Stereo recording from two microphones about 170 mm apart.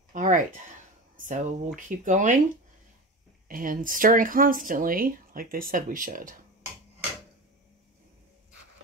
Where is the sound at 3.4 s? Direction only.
55° right (ahead or behind).